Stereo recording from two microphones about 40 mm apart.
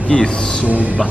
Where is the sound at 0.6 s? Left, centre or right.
Right.